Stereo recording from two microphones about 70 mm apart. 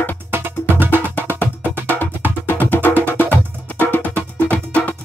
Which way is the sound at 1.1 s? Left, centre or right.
Left.